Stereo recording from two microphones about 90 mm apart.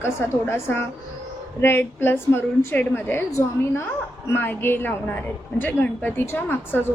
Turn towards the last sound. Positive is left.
turn(degrees=25)  # may be behind; listen again after turning